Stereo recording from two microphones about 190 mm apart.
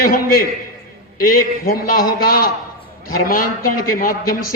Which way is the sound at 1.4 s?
45° left (ahead or behind).